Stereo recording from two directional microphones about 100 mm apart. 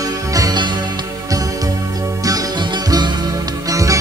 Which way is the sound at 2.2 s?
45° right (ahead or behind).